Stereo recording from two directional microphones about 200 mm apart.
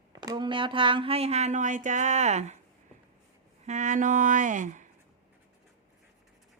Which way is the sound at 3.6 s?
35° right (ahead or behind).